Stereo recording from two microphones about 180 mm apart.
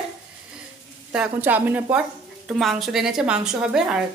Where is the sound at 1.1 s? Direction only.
10° right (ahead or behind).